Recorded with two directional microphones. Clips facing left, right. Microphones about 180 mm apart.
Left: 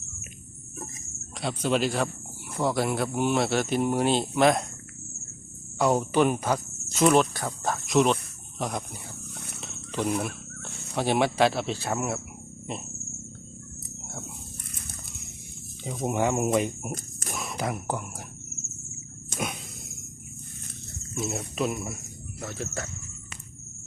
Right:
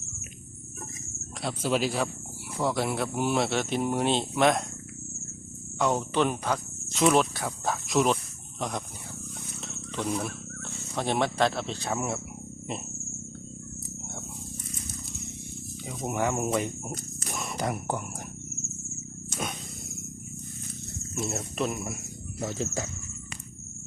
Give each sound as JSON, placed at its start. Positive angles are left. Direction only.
{"t": 1.4, "sound": "speech", "side_deg": 0}
{"t": 5.8, "sound": "speech", "side_deg": 5}
{"t": 16.0, "sound": "speech", "side_deg": 20}
{"t": 17.3, "sound": "speech", "side_deg": 0}
{"t": 21.2, "sound": "speech", "side_deg": 5}
{"t": 22.4, "sound": "speech", "side_deg": -15}